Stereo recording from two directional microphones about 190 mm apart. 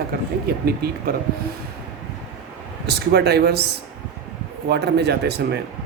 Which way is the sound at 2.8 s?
60° right (ahead or behind).